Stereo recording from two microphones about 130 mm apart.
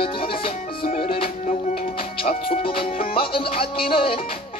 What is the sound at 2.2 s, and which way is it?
Speech, 50° left (ahead or behind).